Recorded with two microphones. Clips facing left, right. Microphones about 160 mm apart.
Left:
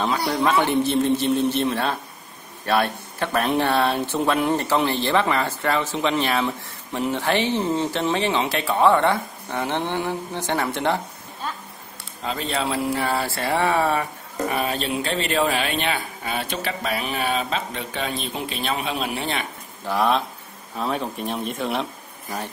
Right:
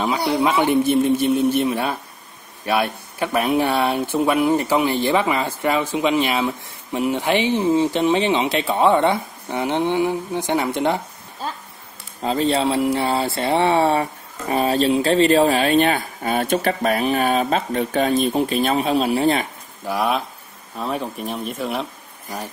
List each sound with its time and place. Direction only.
0.2 s speech: 10° right (ahead or behind)
12.2 s speech: 35° right (ahead or behind)
19.9 s speech: 5° right (ahead or behind)